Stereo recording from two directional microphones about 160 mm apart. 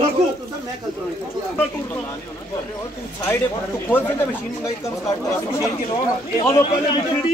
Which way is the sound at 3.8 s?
15° left (ahead or behind).